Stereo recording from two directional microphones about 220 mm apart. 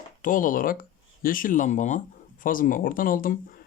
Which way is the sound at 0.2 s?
35° left (ahead or behind).